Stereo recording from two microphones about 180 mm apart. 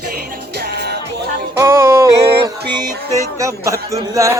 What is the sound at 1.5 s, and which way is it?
Speech, 15° right (ahead or behind).